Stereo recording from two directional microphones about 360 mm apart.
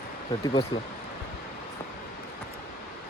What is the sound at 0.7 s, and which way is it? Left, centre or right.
Speech, centre.